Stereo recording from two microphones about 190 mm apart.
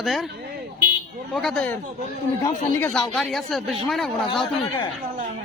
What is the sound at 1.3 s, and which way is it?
Speech, centre (ahead or behind).